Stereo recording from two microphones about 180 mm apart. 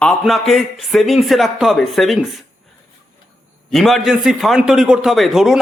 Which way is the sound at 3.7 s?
Centre (ahead or behind).